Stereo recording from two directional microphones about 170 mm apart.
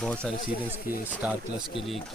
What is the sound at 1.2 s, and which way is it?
Speech, 10° right (ahead or behind).